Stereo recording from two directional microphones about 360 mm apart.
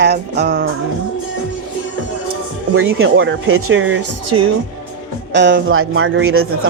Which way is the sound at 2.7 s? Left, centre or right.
Right.